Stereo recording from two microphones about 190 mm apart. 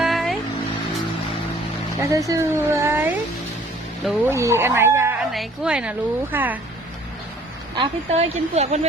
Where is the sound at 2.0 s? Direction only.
15° right (ahead or behind).